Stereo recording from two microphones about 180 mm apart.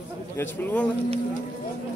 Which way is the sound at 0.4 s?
10° left (ahead or behind).